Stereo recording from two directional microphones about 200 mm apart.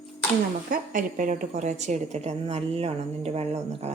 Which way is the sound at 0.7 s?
45° right (ahead or behind).